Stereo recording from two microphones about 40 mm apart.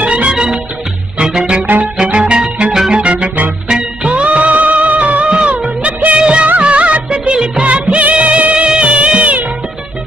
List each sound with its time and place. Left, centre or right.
0.0 s music: right
2.9 s music: right
6.1 s music of bollywood: right
8.6 s music: right